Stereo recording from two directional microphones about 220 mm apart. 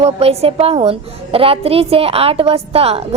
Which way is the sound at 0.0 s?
25° right (ahead or behind).